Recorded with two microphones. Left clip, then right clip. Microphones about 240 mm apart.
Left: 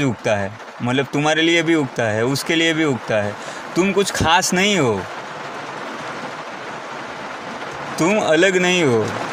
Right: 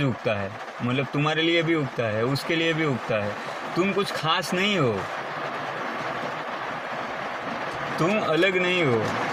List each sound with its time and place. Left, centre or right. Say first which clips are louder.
0.9 s speech: left 7 dB; left
7.9 s speech: left 7 dB; left